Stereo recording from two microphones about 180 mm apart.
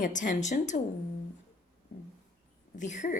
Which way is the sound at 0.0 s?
45° left (ahead or behind).